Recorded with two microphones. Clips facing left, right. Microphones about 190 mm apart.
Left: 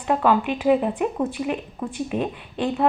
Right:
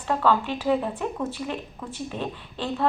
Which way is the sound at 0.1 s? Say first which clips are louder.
Left 3 dB; 15° left (ahead or behind).